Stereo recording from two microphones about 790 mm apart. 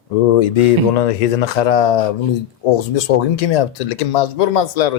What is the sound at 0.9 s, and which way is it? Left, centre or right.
Speech, left.